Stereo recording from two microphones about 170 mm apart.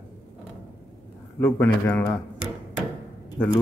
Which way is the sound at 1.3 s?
10° left (ahead or behind).